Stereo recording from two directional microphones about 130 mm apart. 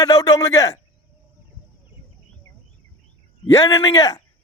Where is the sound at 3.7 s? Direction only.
30° left (ahead or behind).